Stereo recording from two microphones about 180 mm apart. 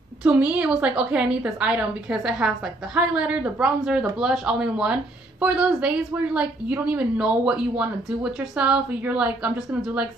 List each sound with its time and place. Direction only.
0.2 s a woman's voice: 5° right (ahead or behind)